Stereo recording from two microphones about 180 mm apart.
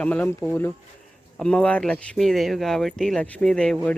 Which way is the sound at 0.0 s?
10° left (ahead or behind).